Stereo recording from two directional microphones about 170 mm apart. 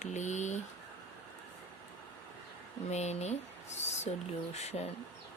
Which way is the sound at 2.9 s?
40° left (ahead or behind).